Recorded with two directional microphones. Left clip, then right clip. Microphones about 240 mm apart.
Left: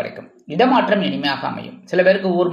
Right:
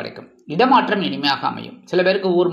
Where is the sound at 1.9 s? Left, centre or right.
Centre.